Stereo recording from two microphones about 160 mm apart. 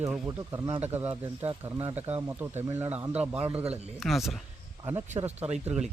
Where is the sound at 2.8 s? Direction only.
10° right (ahead or behind).